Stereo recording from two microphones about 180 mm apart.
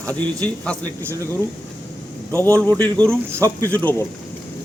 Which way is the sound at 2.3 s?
10° left (ahead or behind).